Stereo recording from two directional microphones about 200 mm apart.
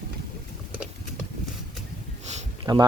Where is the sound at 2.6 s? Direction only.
20° right (ahead or behind).